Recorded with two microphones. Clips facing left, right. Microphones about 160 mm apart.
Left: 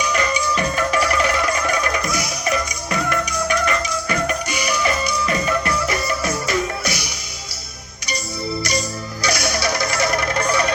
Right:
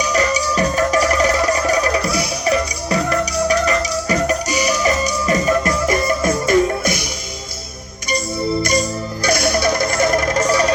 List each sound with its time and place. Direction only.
0.0 s music: 35° right (ahead or behind)
9.2 s music: 50° right (ahead or behind)